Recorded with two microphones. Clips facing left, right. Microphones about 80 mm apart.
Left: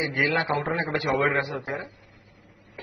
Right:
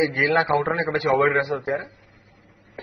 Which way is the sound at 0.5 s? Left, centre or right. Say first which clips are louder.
Right 6 dB; centre.